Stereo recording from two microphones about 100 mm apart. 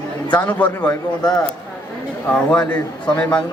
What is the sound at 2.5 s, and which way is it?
Speech, 15° left (ahead or behind).